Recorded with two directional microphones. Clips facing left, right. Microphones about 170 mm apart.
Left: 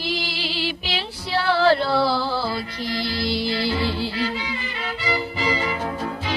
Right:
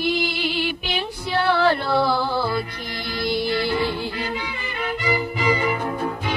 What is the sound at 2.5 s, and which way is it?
Music, 50° right (ahead or behind).